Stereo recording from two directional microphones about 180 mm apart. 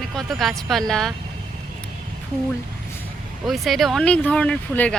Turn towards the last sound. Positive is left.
turn(degrees=5)  # may be behind; listen again after turning